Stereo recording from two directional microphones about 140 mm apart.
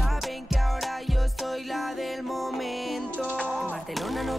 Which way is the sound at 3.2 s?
10° right (ahead or behind).